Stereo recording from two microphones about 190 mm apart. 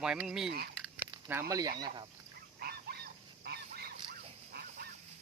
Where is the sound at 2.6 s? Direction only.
55° right (ahead or behind).